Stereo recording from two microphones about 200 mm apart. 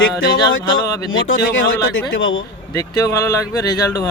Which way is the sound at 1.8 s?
75° left (ahead or behind).